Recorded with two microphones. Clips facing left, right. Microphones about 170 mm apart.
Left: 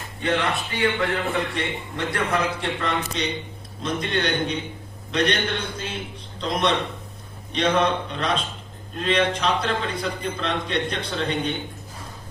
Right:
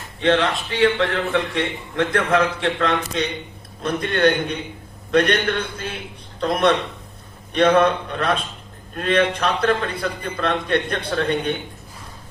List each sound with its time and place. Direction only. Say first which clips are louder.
0.2 s speech: right 5 dB; 85° right
2.0 s a man's voice: right 6 dB; 80° right; by 11.5 s 55° right (ahead or behind)